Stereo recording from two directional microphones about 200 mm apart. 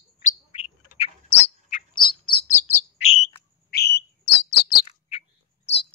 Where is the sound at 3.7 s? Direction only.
55° left (ahead or behind).